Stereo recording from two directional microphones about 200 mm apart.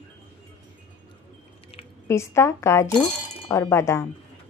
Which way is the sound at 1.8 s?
30° left (ahead or behind).